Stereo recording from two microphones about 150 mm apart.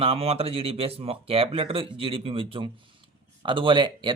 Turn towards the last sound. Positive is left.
turn(degrees=-30)  # may be behind; listen again after turning